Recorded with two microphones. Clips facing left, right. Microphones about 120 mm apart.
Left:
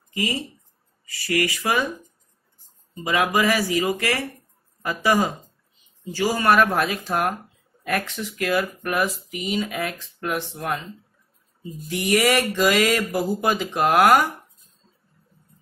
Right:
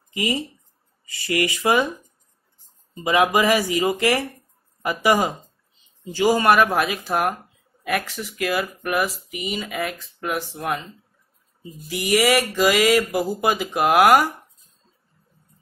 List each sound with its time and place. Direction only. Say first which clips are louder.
0.1 s speech: right 2 dB; 20° right (ahead or behind)
3.0 s speech: right 3 dB; 20° right (ahead or behind); by 10.8 s centre (ahead or behind)
11.8 s speech: right 1 dB; centre (ahead or behind)